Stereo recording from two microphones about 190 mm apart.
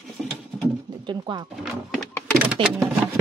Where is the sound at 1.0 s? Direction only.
25° right (ahead or behind).